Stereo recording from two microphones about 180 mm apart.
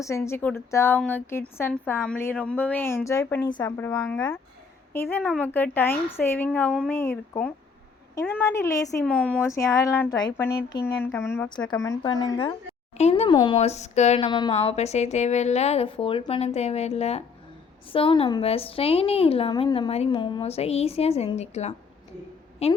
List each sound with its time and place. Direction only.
0.3 s speech: 15° left (ahead or behind)
9.0 s speech: 5° left (ahead or behind)
11.4 s speech: 25° left (ahead or behind)
13.0 s a woman's voice: 35° left (ahead or behind)
14.3 s speech: 25° left (ahead or behind)
14.5 s a woman's voice: 35° left (ahead or behind)